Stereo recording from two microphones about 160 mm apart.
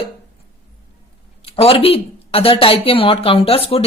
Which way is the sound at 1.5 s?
35° left (ahead or behind).